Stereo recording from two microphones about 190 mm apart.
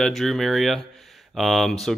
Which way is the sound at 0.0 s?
Centre (ahead or behind).